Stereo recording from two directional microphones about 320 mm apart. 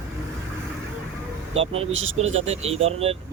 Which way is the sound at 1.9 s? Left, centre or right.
Right.